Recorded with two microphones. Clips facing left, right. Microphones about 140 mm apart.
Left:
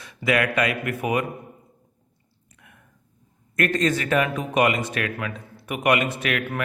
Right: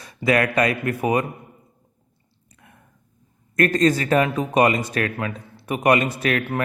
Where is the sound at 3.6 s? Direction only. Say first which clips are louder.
Right 4 dB; 35° right (ahead or behind).